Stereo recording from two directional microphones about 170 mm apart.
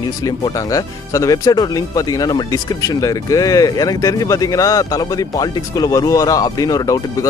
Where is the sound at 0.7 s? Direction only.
20° left (ahead or behind).